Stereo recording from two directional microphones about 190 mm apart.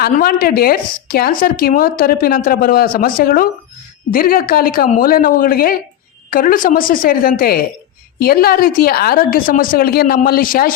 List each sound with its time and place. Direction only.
0.0 s speech: 50° left (ahead or behind)